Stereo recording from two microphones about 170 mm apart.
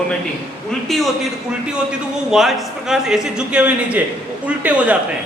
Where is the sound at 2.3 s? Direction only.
Centre (ahead or behind).